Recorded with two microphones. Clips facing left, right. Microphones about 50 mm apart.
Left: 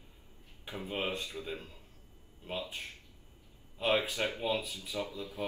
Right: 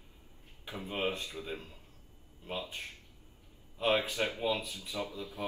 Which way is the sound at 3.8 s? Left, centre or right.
Left.